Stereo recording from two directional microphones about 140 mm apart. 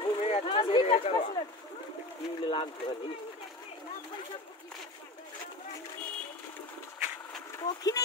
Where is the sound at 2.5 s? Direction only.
40° left (ahead or behind).